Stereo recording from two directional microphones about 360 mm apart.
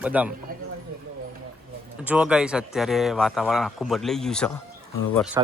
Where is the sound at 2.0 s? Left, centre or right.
Centre.